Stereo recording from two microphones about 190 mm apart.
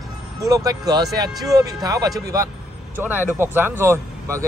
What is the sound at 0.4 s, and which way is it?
Speech, 20° right (ahead or behind).